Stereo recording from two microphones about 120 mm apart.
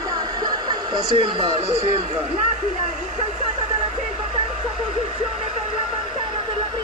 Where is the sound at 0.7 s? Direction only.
40° right (ahead or behind).